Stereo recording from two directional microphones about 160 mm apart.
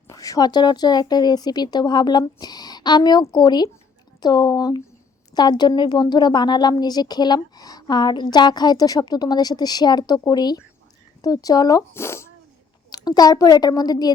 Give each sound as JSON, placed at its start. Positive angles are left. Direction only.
{"t": 0.1, "sound": "a woman's voice", "side_deg": 20}